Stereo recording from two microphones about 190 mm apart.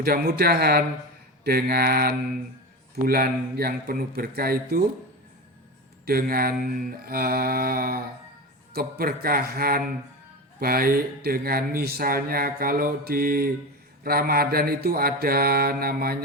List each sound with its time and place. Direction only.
0.0 s speech: 55° right (ahead or behind)
6.1 s speech: 50° right (ahead or behind)